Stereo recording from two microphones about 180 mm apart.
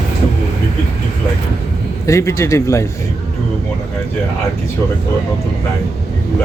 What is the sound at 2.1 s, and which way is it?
Speech, 15° left (ahead or behind).